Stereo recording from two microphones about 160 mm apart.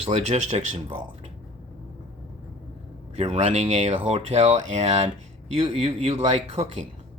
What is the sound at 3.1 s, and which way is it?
Speech, 40° right (ahead or behind).